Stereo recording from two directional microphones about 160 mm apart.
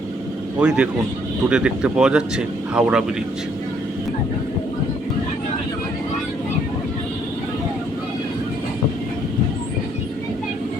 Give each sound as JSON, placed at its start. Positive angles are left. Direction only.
{"t": 0.6, "sound": "a man's voice", "side_deg": -5}